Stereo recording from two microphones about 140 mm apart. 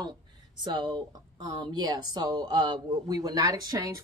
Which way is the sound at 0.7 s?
30° right (ahead or behind).